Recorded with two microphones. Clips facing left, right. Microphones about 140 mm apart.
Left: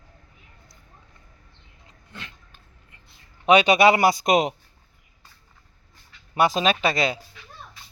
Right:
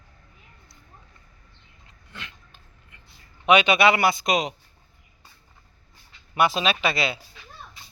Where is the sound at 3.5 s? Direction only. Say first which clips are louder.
Left 2 dB; 40° left (ahead or behind).